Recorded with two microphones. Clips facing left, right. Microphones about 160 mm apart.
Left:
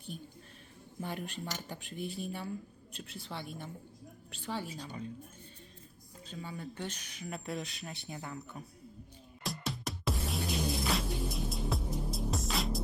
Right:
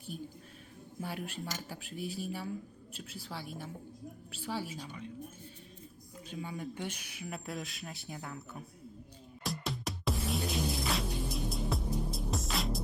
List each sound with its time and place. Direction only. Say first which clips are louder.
1.0 s a woman's voice: even; 5° right (ahead or behind)
4.9 s a woman's voice: left 3 dB; 35° left (ahead or behind)
6.2 s speech: right 2 dB; 10° right (ahead or behind)
9.4 s music: right 1 dB; centre (ahead or behind)